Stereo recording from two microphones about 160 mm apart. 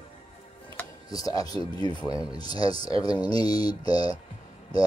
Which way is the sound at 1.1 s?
20° left (ahead or behind).